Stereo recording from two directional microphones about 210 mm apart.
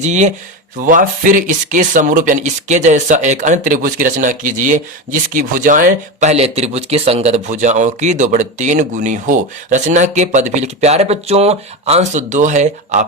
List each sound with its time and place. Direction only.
0.0 s speech: 35° right (ahead or behind)